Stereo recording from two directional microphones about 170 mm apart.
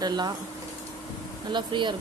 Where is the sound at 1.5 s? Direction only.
25° right (ahead or behind).